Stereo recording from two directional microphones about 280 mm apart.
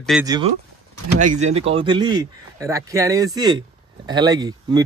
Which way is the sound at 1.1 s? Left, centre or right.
Right.